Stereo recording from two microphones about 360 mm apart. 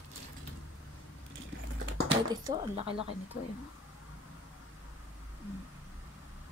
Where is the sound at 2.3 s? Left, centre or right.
Centre.